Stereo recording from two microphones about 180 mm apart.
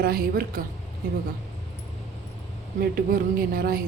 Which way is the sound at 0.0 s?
55° right (ahead or behind).